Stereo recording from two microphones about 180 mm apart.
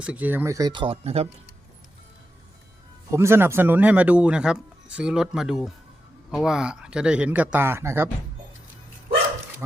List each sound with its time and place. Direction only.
0.0 s speech: 10° right (ahead or behind); by 1.3 s 35° right (ahead or behind)
3.1 s speech: 15° right (ahead or behind)